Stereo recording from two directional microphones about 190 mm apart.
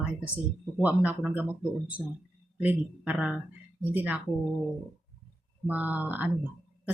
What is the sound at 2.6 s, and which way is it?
Speech, 5° right (ahead or behind).